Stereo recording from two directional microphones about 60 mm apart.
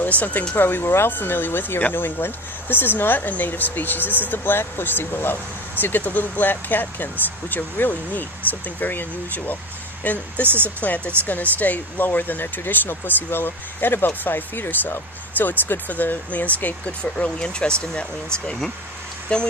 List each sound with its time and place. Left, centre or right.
0.2 s speech: left
10.4 s speech: right
10.8 s speech: left